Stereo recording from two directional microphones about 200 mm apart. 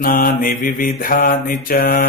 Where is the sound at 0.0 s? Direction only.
45° left (ahead or behind).